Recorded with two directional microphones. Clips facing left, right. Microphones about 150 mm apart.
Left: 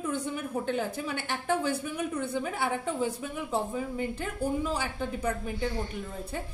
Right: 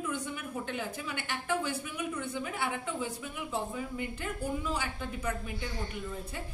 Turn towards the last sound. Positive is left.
turn(degrees=35)  # may be behind; listen again after turning